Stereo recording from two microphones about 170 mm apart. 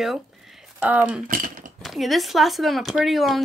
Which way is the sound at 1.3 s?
50° right (ahead or behind).